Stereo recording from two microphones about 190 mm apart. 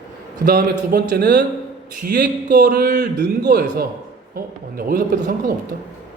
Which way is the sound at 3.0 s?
60° right (ahead or behind).